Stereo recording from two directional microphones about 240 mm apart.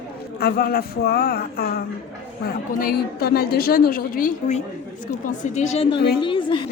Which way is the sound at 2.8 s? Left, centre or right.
Left.